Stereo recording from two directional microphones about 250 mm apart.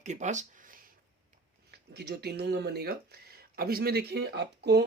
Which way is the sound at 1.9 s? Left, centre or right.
Right.